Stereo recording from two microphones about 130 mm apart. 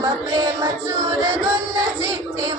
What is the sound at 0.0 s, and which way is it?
Music, 25° right (ahead or behind).